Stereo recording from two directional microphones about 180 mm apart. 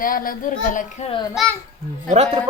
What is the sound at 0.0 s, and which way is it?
Speech, 50° left (ahead or behind).